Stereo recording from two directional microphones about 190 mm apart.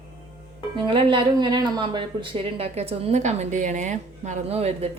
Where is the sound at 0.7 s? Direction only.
25° right (ahead or behind).